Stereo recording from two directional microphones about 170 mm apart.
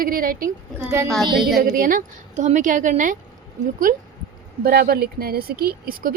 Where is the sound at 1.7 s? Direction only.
55° right (ahead or behind).